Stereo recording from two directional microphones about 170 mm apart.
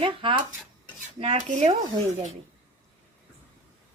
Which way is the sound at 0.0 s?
30° right (ahead or behind).